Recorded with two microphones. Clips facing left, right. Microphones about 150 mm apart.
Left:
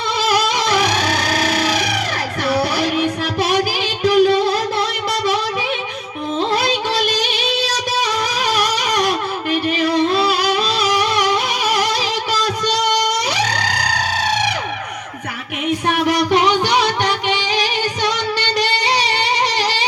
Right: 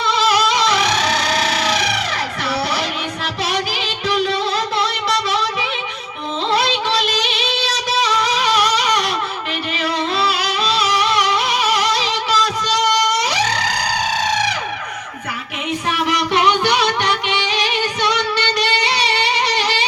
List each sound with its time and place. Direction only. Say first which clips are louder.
0.1 s music: right 1 dB; 50° left (ahead or behind)
6.5 s music: even; 45° left (ahead or behind)
15.9 s music: left 3 dB; 50° left (ahead or behind)